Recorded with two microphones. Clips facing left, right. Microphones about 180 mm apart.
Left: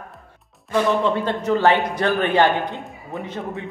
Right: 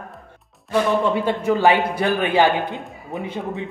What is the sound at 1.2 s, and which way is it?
A man's voice, 10° right (ahead or behind).